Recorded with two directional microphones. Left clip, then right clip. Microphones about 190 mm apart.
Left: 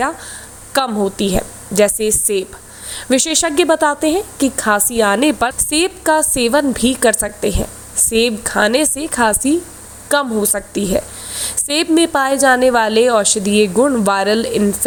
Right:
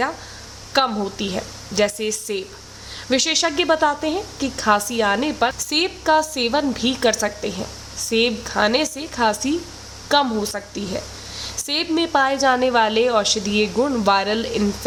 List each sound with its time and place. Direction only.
0.7 s a woman's voice: 30° left (ahead or behind)